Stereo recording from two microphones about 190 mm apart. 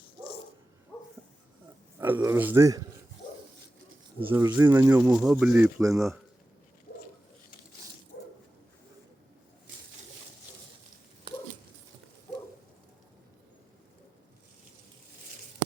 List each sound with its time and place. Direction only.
0.9 s a sound: 10° left (ahead or behind)
2.0 s speech: 10° right (ahead or behind)
4.3 s speech: 10° right (ahead or behind)
6.9 s bird: 55° left (ahead or behind)